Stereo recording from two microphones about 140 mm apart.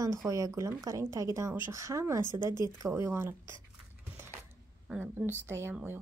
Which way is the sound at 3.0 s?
20° right (ahead or behind).